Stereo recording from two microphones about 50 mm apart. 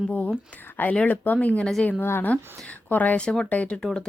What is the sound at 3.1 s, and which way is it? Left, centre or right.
Speech, centre.